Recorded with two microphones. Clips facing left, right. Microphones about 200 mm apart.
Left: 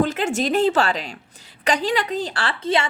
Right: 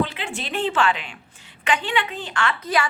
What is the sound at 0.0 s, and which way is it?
A woman's voice, 45° left (ahead or behind).